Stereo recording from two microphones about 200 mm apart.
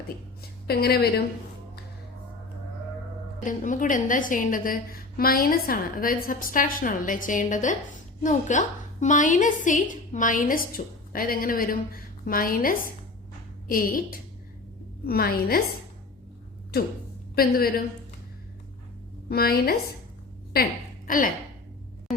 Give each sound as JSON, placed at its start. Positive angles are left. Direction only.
{"t": 0.7, "sound": "a woman's voice", "side_deg": 50}
{"t": 3.4, "sound": "a woman's voice", "side_deg": 40}
{"t": 17.3, "sound": "a woman's voice", "side_deg": 45}
{"t": 19.3, "sound": "a woman's voice", "side_deg": 50}